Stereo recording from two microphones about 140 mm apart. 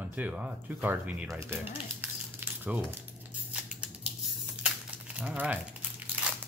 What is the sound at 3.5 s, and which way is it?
Scissors, 5° right (ahead or behind).